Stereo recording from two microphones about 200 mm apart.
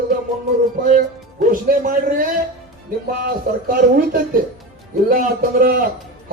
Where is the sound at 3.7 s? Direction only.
45° right (ahead or behind).